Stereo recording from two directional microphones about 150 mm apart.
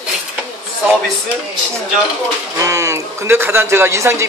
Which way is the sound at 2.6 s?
20° right (ahead or behind).